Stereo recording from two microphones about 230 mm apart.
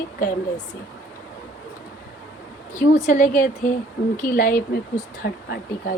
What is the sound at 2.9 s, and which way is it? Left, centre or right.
A woman's voice, left.